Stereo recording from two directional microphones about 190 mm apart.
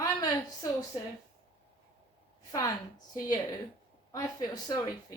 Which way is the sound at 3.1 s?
20° left (ahead or behind).